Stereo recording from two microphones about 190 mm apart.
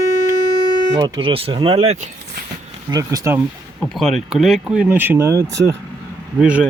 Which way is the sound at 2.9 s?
20° right (ahead or behind).